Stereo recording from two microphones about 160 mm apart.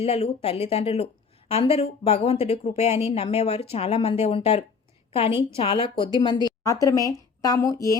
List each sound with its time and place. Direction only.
0.0 s a woman's voice: 40° left (ahead or behind); by 7.9 s 20° left (ahead or behind)